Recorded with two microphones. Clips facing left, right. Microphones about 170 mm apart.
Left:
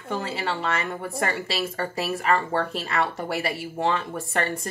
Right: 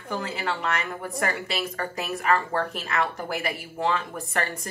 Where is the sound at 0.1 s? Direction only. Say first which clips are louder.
Left 1 dB; 30° left (ahead or behind).